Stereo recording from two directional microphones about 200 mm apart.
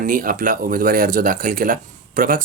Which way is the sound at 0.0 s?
45° right (ahead or behind).